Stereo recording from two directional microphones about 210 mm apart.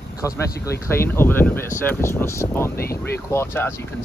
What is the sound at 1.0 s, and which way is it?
Speech, 10° left (ahead or behind).